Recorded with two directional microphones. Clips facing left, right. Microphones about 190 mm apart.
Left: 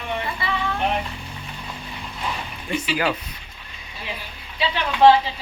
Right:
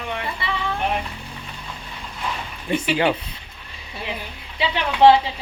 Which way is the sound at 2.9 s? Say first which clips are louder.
Right 3 dB; 30° right (ahead or behind).